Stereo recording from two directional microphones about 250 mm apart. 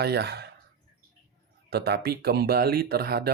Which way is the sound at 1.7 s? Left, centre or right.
Right.